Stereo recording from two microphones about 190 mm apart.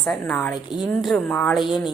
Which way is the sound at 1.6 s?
5° right (ahead or behind).